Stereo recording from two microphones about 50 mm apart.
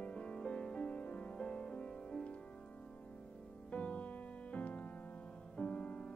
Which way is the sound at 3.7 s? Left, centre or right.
Left.